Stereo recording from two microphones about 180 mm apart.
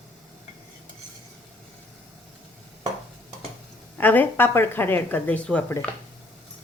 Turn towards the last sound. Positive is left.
turn(degrees=5)  # may be behind; listen again after turning